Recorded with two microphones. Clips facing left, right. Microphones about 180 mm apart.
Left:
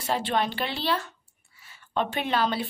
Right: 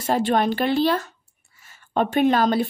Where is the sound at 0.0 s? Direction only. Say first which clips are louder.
Right 6 dB; 45° right (ahead or behind).